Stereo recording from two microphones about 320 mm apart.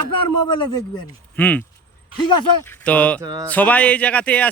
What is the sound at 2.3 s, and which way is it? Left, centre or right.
Speech, left.